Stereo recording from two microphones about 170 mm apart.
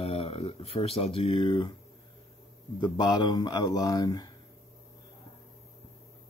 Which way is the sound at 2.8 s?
25° left (ahead or behind).